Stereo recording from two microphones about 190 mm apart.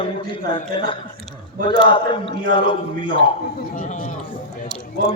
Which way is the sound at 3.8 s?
45° left (ahead or behind).